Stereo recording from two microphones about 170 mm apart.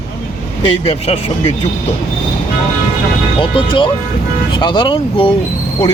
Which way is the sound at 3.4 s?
30° left (ahead or behind).